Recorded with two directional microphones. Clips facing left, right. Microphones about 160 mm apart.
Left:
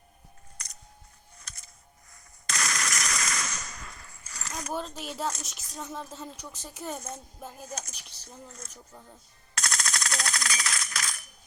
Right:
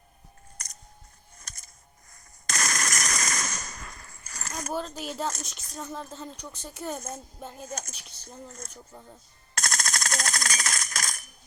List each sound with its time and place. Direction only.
0.6 s scissors: 45° right (ahead or behind)
1.4 s a sound: 45° right (ahead or behind)
4.7 s a woman's voice: centre (ahead or behind)
8.4 s speech: 45° right (ahead or behind)
9.6 s coin: 45° right (ahead or behind)